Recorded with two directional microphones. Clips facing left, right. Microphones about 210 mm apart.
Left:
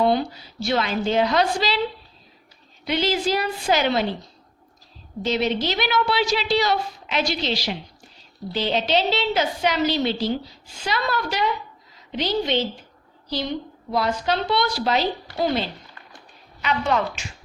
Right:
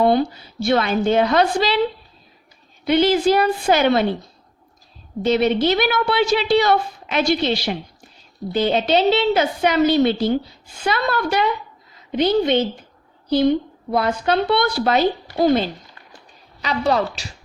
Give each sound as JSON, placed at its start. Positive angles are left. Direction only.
{"t": 0.0, "sound": "a woman's voice", "side_deg": -55}
{"t": 2.8, "sound": "a woman's voice", "side_deg": -55}
{"t": 5.2, "sound": "a woman's voice", "side_deg": -55}
{"t": 13.9, "sound": "a woman's voice", "side_deg": -55}
{"t": 16.6, "sound": "speech", "side_deg": -35}